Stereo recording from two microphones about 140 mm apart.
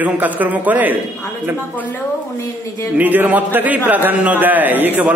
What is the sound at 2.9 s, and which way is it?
A man's voice, 10° right (ahead or behind).